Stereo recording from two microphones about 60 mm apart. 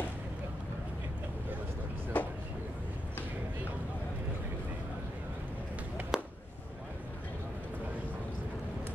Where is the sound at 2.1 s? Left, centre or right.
Left.